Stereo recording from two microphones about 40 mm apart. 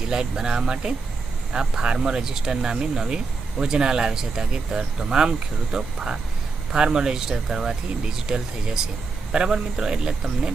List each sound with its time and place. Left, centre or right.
0.1 s speech: centre